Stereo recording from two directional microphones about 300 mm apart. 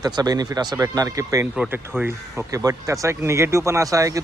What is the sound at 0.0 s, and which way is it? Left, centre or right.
A man's voice, centre.